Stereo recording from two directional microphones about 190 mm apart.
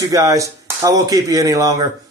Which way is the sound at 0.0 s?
15° right (ahead or behind).